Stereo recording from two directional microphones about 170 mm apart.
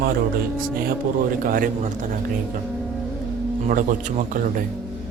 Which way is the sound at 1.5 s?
55° right (ahead or behind).